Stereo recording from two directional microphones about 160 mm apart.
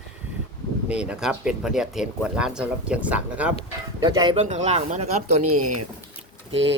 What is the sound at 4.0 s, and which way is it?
Speech, 25° right (ahead or behind).